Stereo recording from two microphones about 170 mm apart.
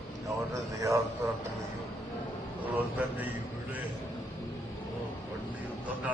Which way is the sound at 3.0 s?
10° right (ahead or behind).